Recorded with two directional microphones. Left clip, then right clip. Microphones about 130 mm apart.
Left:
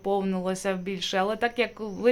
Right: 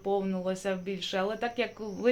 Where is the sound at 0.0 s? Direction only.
45° left (ahead or behind).